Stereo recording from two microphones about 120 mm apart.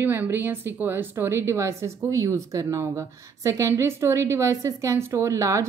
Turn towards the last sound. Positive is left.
turn(degrees=-25)  # may be behind; listen again after turning